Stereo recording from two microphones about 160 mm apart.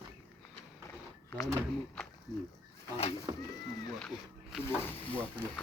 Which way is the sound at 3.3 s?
25° right (ahead or behind).